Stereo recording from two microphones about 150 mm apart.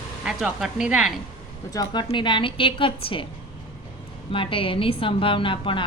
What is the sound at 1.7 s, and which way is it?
A woman's voice, 25° left (ahead or behind).